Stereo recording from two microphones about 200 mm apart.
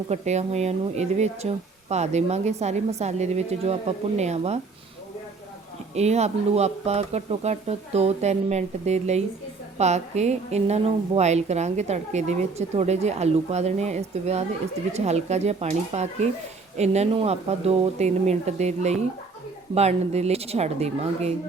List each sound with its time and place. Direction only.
0.1 s a woman's voice: 35° right (ahead or behind)
5.9 s a woman's voice: 35° right (ahead or behind)